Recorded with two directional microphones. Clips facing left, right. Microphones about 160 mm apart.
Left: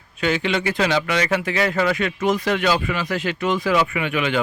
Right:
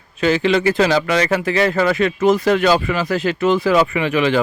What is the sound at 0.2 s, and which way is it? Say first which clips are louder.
A man's voice: right 6 dB; 35° right (ahead or behind).